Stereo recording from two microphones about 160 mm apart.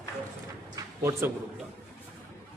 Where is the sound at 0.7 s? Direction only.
20° right (ahead or behind).